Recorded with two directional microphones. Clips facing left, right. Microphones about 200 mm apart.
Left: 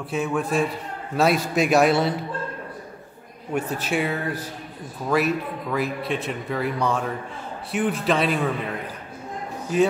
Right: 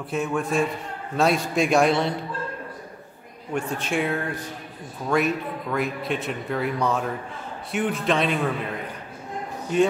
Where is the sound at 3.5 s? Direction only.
5° left (ahead or behind).